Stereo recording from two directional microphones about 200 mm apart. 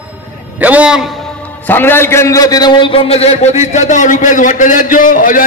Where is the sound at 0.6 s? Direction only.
5° right (ahead or behind).